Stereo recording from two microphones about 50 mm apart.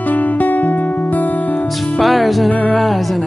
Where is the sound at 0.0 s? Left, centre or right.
Left.